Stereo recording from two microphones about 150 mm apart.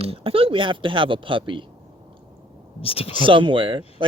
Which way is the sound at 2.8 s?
40° left (ahead or behind).